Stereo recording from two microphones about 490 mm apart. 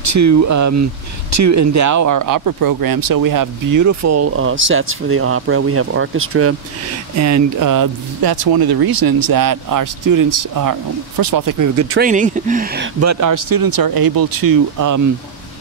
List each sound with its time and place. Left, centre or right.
0.0 s speech: right
11.9 s speech: centre
13.0 s speech: right